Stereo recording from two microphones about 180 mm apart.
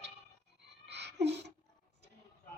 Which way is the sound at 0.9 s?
70° right (ahead or behind).